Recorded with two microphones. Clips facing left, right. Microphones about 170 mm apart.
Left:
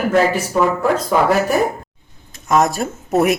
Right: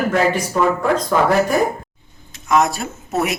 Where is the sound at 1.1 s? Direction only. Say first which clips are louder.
Left 1 dB; 10° left (ahead or behind).